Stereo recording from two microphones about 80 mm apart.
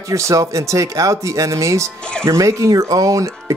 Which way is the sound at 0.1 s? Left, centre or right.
Right.